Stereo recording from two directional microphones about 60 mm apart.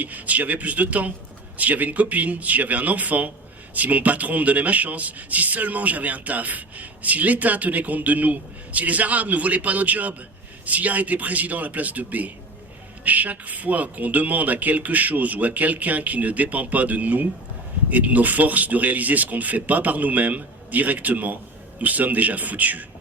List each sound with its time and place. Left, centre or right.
0.0 s speech: right